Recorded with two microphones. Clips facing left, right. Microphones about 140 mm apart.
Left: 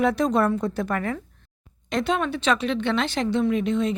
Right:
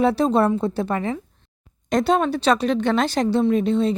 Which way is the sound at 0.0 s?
30° right (ahead or behind).